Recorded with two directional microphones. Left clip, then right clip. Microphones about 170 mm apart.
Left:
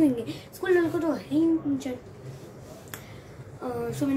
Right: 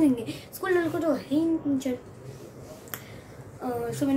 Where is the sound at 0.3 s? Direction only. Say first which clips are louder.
Left 2 dB; 10° right (ahead or behind).